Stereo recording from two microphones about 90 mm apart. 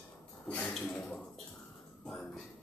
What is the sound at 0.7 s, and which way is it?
Speech, 5° left (ahead or behind).